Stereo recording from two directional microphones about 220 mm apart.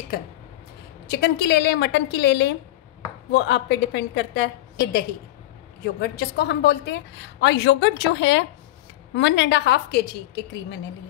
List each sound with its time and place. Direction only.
1.1 s a woman's voice: 50° left (ahead or behind)